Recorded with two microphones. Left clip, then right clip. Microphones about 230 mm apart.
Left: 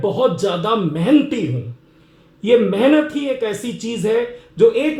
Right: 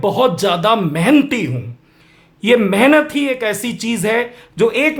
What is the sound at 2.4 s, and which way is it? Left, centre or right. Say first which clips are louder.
Speech: right 2 dB; right.